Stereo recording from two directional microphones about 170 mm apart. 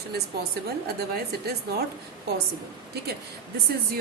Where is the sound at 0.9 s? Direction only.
65° right (ahead or behind).